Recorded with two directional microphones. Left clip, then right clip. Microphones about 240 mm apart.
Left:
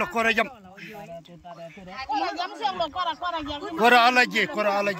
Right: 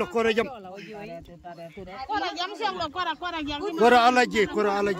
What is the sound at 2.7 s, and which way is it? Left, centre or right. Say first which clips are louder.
Speech: left 2 dB; centre.